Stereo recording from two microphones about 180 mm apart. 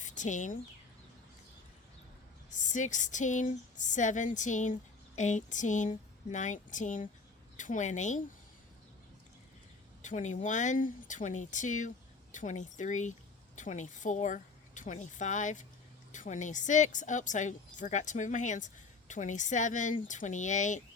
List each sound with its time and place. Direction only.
0.0 s speech: 45° left (ahead or behind)
2.5 s a woman's voice: 45° left (ahead or behind)
10.0 s speech: 45° left (ahead or behind)